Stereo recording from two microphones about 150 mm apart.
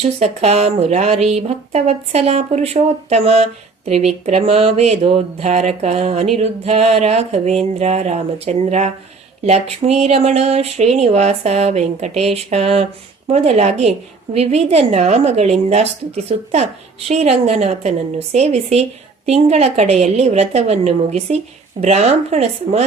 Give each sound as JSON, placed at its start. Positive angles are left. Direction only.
{"t": 0.0, "sound": "speech", "side_deg": -45}